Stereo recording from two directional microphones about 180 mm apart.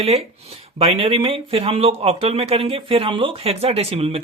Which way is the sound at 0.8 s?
35° right (ahead or behind).